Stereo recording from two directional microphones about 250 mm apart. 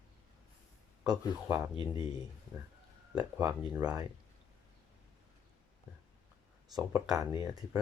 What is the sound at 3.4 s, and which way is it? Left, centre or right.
Speech, centre.